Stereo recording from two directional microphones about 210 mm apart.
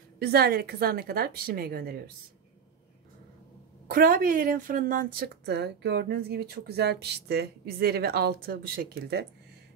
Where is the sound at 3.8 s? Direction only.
45° right (ahead or behind).